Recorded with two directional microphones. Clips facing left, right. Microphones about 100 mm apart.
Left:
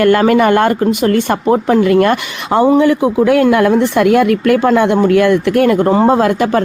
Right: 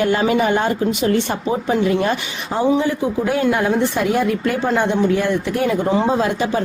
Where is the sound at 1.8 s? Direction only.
70° left (ahead or behind).